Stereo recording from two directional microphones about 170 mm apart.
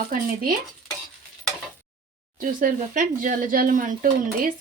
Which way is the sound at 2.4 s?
55° right (ahead or behind).